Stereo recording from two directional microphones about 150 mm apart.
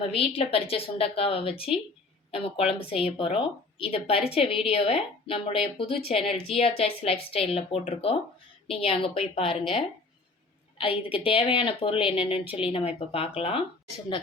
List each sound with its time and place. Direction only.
0.1 s a woman's voice: 40° left (ahead or behind)